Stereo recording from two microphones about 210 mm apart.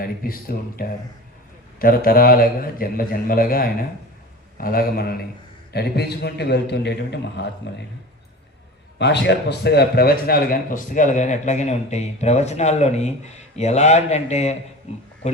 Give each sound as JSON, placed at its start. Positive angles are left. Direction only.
{"t": 0.0, "sound": "a man's voice", "side_deg": 45}
{"t": 9.0, "sound": "a man's voice", "side_deg": 55}